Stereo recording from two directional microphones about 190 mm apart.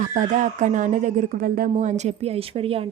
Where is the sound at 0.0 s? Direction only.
40° right (ahead or behind).